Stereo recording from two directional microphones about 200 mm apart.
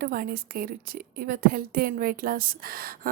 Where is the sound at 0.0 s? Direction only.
45° right (ahead or behind).